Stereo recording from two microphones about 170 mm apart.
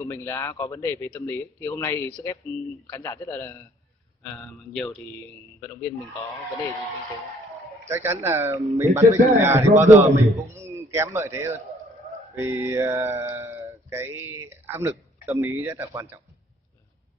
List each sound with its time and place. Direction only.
0.0 s speech: 15° left (ahead or behind)
7.9 s speech: 15° right (ahead or behind)